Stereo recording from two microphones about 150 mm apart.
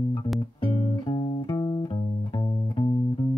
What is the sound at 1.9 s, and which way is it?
Music, 35° left (ahead or behind).